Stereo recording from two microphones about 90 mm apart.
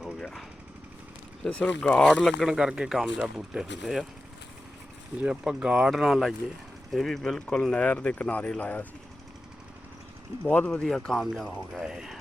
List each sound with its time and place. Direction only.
0.2 s jackhammer: 5° left (ahead or behind)
1.5 s speech: 15° left (ahead or behind)
2.5 s speech: 5° right (ahead or behind)
5.2 s speech: 15° right (ahead or behind); by 8.9 s 15° left (ahead or behind)
10.4 s speech: 15° left (ahead or behind)
10.8 s speech: 5° left (ahead or behind)